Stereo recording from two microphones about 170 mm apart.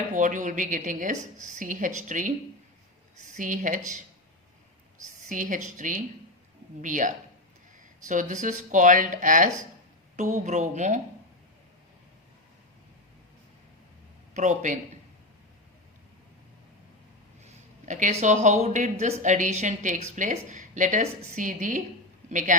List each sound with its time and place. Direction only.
0.1 s a woman's voice: 50° right (ahead or behind)
3.3 s a woman's voice: 50° right (ahead or behind)
5.0 s a woman's voice: 50° right (ahead or behind)
14.3 s a woman's voice: 45° right (ahead or behind)
17.4 s a woman's voice: 45° right (ahead or behind)